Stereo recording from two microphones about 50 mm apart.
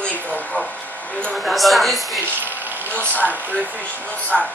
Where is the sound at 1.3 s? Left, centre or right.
Centre.